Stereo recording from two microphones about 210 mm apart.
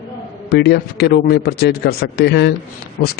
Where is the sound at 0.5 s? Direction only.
50° left (ahead or behind).